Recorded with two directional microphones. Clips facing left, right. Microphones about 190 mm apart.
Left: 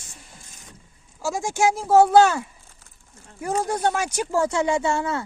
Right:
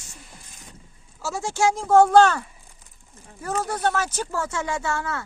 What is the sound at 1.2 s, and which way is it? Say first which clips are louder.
A man's voice: left 1 dB; 15° left (ahead or behind).